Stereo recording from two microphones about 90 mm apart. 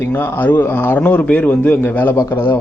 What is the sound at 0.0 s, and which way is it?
Speech, 25° left (ahead or behind).